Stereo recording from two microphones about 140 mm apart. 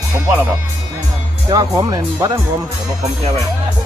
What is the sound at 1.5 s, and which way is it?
Speech, 25° right (ahead or behind).